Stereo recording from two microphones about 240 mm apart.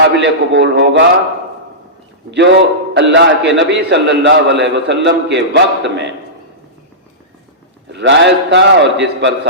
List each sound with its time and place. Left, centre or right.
0.0 s a man's voice: right
2.3 s a man's voice: right
7.9 s a man's voice: right